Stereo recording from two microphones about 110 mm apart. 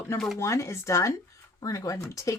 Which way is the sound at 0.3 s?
25° left (ahead or behind).